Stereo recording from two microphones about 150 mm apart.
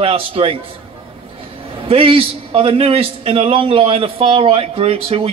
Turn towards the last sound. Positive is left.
turn(degrees=-40)  # may be behind; listen again after turning